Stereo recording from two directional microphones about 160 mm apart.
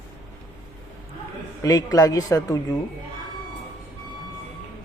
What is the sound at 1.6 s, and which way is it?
Speech, 20° left (ahead or behind).